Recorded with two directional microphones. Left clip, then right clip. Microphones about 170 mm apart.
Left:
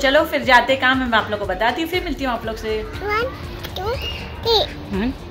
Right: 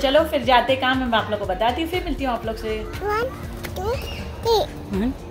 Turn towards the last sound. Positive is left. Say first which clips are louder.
# left 2 dB
turn(degrees=0)  # may be behind; listen again after turning